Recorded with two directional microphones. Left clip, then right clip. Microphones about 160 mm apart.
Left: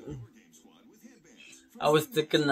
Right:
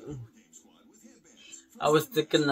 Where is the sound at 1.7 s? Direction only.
10° left (ahead or behind).